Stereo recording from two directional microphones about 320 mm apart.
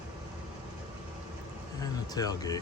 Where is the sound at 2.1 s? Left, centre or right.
Centre.